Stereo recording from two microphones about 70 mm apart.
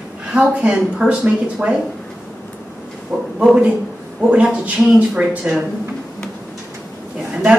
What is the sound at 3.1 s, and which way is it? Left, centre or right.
Speech, right.